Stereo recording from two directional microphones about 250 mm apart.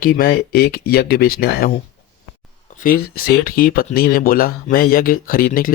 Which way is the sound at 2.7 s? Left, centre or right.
Left.